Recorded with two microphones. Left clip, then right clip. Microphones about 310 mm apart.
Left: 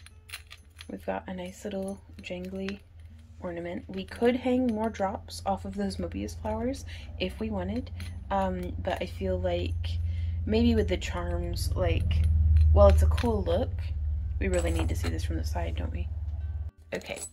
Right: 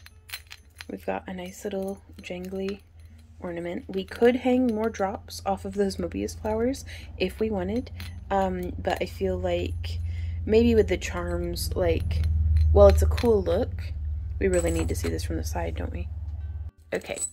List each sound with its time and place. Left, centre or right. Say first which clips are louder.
0.8 s speech: right 3 dB; centre